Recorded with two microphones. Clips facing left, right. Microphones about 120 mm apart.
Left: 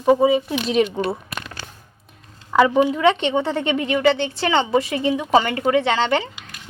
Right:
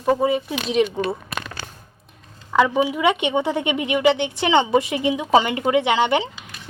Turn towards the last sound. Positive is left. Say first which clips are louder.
# right 1 dB
turn(degrees=-15)  # may be behind; listen again after turning